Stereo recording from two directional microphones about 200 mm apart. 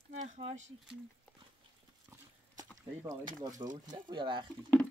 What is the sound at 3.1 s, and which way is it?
Speech, 20° right (ahead or behind).